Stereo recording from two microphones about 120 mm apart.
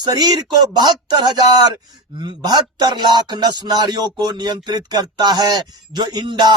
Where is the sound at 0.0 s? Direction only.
35° right (ahead or behind).